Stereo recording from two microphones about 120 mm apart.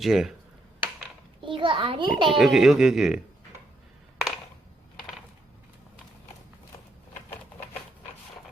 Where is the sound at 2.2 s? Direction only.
Centre (ahead or behind).